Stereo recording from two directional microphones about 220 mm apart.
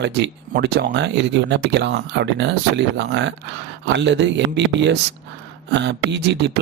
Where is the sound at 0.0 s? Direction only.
50° right (ahead or behind).